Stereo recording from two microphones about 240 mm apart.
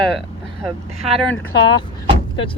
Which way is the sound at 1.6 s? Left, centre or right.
Centre.